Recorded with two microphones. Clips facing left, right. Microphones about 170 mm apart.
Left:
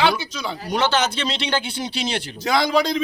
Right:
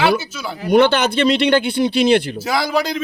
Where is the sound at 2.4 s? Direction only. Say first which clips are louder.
Even; 5° right (ahead or behind).